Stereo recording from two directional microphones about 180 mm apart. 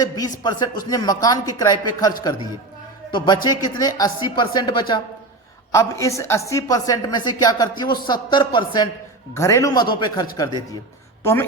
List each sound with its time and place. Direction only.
0.0 s a woman's voice: 20° left (ahead or behind)